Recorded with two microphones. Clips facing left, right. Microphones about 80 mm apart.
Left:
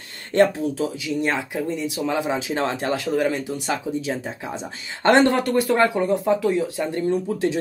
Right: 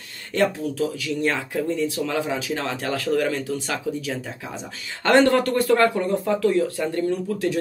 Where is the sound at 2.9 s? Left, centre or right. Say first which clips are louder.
Right 2 dB; centre.